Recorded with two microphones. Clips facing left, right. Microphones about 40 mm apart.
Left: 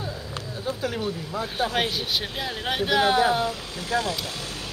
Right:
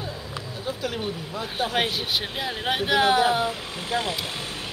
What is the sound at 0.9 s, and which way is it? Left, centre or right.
Speech, right.